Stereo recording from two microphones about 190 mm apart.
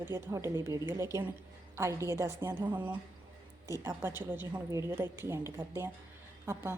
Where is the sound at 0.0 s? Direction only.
15° right (ahead or behind).